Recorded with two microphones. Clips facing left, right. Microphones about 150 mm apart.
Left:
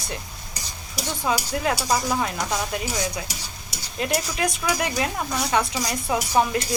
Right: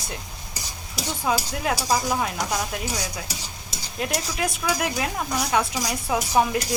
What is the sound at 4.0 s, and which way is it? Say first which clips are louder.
Speech: left 2 dB; centre (ahead or behind).